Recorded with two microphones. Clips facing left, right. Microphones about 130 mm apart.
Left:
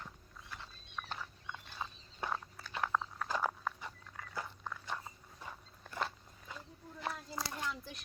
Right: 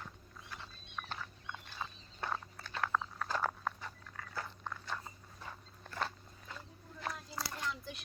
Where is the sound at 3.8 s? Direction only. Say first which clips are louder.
Even; 15° left (ahead or behind).